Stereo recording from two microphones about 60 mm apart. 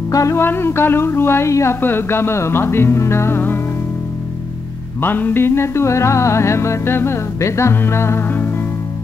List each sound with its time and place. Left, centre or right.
0.1 s music: left
0.4 s music: left
1.8 s music: left
5.0 s music: left